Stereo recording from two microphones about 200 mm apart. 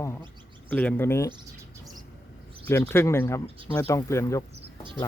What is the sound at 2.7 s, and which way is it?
Speech, 10° left (ahead or behind).